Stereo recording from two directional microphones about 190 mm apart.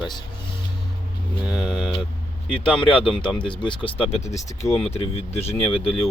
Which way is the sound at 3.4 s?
25° left (ahead or behind).